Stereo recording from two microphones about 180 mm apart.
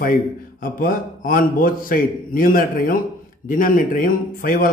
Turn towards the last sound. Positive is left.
turn(degrees=50)  # may be behind; listen again after turning